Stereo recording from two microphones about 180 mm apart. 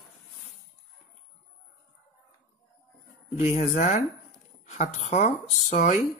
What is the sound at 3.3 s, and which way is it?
Speech, 40° left (ahead or behind).